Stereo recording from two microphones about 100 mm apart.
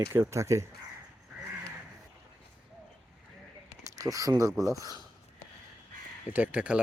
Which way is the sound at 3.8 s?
35° right (ahead or behind).